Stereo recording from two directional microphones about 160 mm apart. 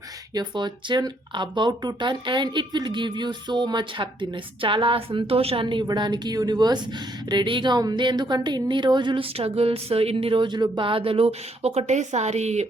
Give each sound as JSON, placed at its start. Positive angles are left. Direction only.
{"t": 0.3, "sound": "speech", "side_deg": -30}